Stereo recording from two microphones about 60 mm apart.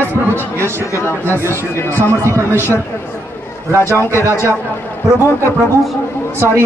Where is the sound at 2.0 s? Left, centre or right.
Right.